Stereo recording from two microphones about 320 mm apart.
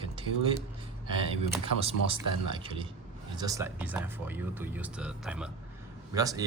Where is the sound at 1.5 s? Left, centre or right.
Centre.